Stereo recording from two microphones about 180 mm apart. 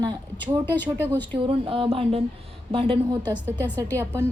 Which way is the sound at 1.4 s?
30° right (ahead or behind).